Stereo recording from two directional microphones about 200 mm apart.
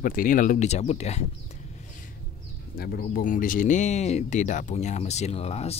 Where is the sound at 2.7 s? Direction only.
50° left (ahead or behind).